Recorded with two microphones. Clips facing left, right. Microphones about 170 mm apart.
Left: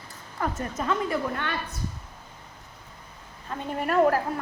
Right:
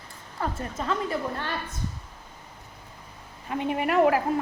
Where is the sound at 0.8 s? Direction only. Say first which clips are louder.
Left 1 dB; 30° right (ahead or behind).